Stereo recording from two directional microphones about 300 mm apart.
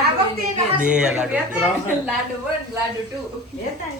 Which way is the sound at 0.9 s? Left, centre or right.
Centre.